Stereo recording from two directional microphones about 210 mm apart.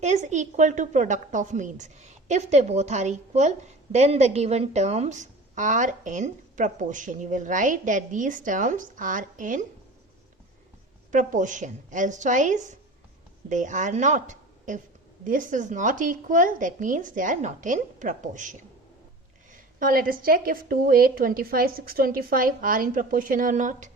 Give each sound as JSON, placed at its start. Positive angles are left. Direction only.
{"t": 0.0, "sound": "a woman's voice", "side_deg": -35}
{"t": 11.1, "sound": "a woman's voice", "side_deg": -40}